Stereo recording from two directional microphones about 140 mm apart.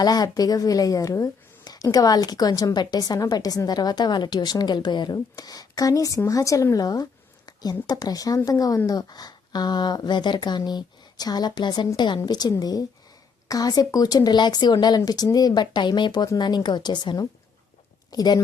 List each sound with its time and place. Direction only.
0.0 s speech: 30° left (ahead or behind)